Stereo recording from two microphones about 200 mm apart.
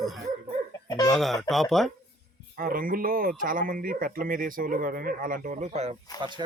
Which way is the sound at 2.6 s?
45° right (ahead or behind).